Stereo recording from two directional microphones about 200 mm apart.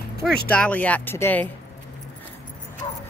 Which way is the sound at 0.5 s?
5° left (ahead or behind).